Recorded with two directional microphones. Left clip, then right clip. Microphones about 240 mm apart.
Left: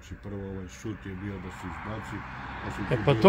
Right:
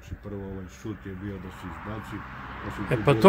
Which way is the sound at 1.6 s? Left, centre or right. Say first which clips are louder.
Even; left.